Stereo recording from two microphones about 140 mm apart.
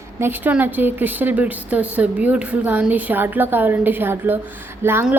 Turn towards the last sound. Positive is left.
turn(degrees=-15)  # may be behind; listen again after turning